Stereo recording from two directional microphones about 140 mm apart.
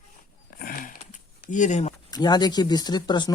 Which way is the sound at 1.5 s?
60° left (ahead or behind).